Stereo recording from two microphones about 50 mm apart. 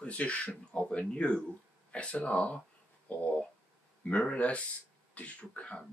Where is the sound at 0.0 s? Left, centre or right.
Left.